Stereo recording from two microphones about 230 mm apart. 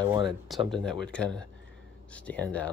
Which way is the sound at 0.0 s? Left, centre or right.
Right.